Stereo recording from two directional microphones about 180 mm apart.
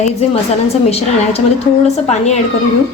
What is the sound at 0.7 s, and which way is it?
A woman's voice, 35° left (ahead or behind).